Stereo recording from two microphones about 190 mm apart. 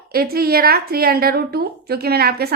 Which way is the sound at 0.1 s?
50° right (ahead or behind).